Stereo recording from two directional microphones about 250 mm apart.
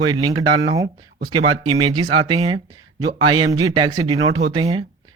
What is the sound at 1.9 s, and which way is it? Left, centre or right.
Speech, centre.